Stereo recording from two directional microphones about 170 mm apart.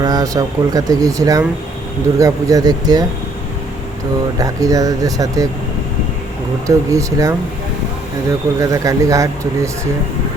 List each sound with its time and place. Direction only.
0.0 s speech: 20° right (ahead or behind)
4.4 s speech: 20° right (ahead or behind)
6.7 s speech: 20° right (ahead or behind)
8.5 s speech: 20° right (ahead or behind)